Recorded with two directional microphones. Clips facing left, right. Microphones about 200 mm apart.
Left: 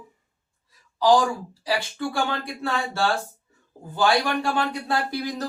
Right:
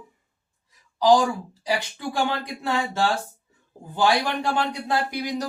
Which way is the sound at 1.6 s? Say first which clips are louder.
Left 1 dB; 15° right (ahead or behind).